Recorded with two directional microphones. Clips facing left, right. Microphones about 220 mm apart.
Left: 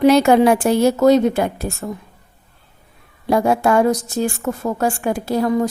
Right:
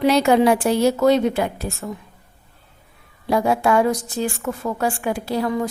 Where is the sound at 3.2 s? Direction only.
45° left (ahead or behind).